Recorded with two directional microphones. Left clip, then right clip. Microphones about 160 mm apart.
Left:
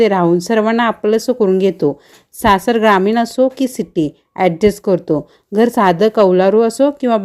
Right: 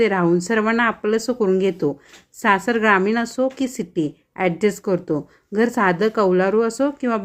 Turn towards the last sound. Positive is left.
turn(degrees=30)  # may be behind; listen again after turning